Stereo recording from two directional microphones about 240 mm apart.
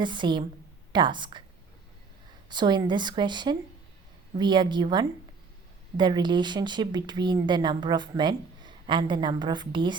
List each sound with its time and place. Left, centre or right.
0.0 s speech: centre
2.5 s a woman's voice: centre